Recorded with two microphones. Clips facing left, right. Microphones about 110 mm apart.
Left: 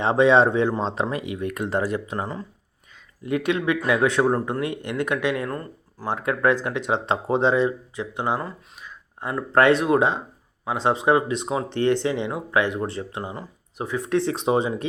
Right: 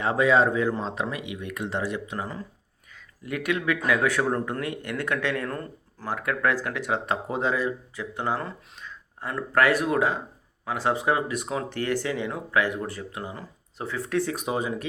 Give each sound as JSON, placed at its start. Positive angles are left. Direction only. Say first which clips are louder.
{"t": 0.0, "sound": "speech", "louder": "left 4 dB", "side_deg": 25}
{"t": 2.9, "sound": "speech", "louder": "left 7 dB", "side_deg": 25}
{"t": 6.1, "sound": "speech", "louder": "left 4 dB", "side_deg": 25}
{"t": 9.2, "sound": "speech", "louder": "left 4 dB", "side_deg": 20}